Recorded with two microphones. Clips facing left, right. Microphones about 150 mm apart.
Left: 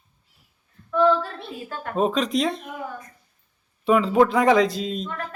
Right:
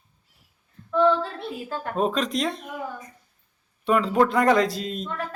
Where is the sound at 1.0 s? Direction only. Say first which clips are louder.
Left 2 dB; 20° right (ahead or behind).